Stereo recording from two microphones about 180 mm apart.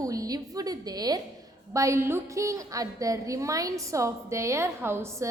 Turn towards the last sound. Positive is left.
turn(degrees=-15)  # may be behind; listen again after turning